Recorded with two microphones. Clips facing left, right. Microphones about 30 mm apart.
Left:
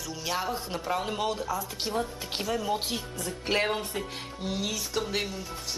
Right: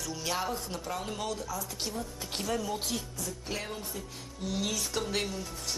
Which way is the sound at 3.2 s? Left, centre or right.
Left.